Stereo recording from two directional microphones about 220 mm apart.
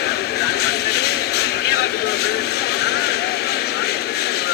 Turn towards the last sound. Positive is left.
turn(degrees=45)  # may be behind; listen again after turning